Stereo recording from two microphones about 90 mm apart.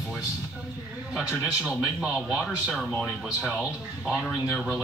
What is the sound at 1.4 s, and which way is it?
Speech, 10° right (ahead or behind).